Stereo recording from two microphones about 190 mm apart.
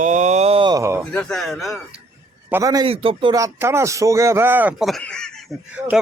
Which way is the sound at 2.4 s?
15° right (ahead or behind).